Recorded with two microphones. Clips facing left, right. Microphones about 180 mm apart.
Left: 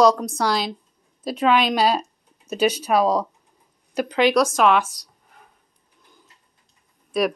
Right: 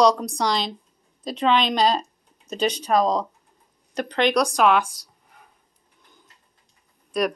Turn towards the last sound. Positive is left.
turn(degrees=5)  # may be behind; listen again after turning